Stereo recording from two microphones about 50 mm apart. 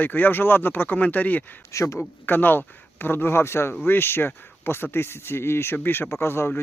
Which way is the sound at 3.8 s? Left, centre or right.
Left.